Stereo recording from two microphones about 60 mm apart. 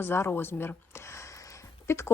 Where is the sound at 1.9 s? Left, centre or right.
Left.